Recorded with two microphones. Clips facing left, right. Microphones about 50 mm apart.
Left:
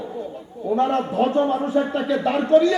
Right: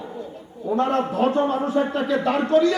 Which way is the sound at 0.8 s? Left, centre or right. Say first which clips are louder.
Left 1 dB; right.